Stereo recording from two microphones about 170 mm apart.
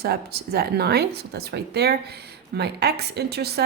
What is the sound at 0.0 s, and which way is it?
Speech, 70° right (ahead or behind).